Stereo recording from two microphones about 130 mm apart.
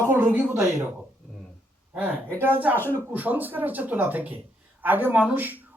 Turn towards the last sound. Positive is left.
turn(degrees=-15)  # may be behind; listen again after turning